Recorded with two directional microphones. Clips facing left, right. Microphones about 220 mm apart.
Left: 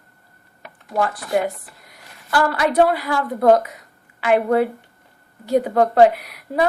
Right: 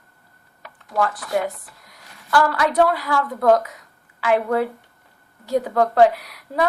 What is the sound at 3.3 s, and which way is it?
Speech, 25° left (ahead or behind).